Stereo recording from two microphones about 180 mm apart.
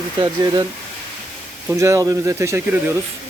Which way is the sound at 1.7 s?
15° right (ahead or behind).